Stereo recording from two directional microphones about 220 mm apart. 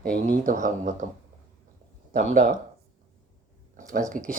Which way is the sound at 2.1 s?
35° right (ahead or behind).